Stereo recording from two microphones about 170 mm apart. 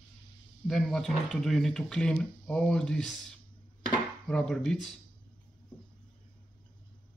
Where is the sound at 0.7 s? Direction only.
Centre (ahead or behind).